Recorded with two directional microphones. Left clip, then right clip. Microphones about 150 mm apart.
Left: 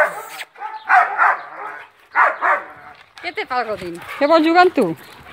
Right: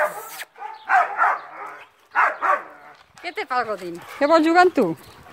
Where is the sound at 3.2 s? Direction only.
5° right (ahead or behind).